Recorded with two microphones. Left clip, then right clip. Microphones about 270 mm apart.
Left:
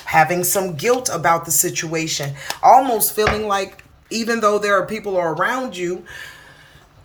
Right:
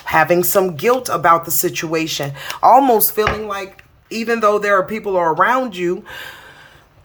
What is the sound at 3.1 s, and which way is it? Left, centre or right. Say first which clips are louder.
Speech: left 1 dB; centre.